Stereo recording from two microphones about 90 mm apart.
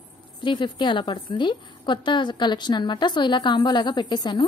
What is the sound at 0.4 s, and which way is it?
A woman's voice, 60° left (ahead or behind).